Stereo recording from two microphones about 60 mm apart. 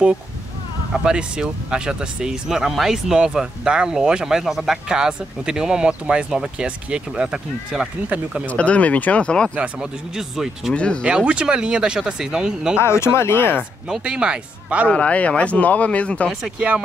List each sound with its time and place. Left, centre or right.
1.0 s speech: centre
8.5 s speech: left
9.6 s speech: centre
10.7 s speech: centre
11.1 s speech: centre
12.7 s speech: left
14.0 s speech: centre
14.9 s speech: left